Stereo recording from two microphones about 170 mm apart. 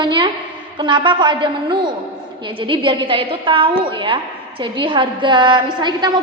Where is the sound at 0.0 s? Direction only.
25° right (ahead or behind).